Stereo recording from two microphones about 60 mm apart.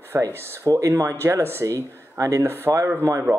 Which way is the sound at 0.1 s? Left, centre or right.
Right.